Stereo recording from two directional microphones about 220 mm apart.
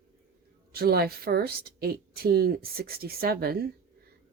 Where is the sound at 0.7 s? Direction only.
45° right (ahead or behind).